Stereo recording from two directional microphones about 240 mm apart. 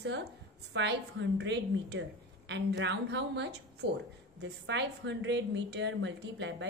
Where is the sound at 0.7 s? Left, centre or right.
Right.